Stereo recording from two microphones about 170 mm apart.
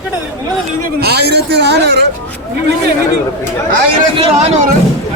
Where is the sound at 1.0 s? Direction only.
75° right (ahead or behind).